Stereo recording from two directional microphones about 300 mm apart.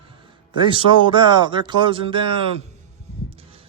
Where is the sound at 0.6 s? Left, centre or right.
Centre.